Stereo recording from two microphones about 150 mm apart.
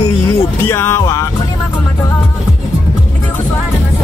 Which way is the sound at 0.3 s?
15° left (ahead or behind).